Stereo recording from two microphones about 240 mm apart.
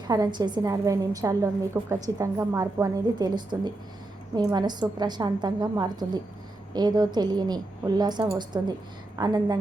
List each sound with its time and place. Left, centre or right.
0.1 s a woman's voice: centre